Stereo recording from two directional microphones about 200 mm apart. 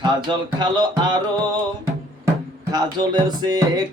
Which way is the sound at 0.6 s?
20° right (ahead or behind).